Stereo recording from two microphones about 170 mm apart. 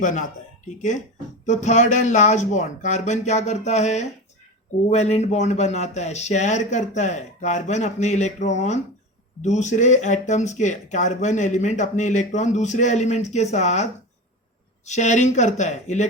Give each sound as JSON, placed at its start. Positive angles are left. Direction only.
{"t": 0.0, "sound": "speech", "side_deg": 45}